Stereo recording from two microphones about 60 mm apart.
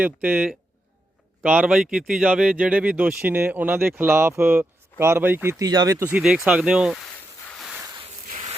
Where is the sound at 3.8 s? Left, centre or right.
Right.